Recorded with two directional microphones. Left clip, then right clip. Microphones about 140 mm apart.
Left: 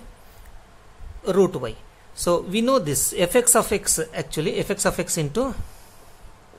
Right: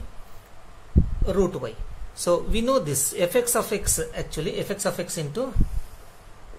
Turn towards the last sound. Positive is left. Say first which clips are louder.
# left 4 dB
turn(degrees=60)  # may be behind; listen again after turning